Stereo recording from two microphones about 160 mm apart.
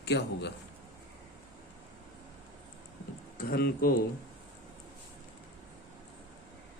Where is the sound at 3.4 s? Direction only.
70° left (ahead or behind).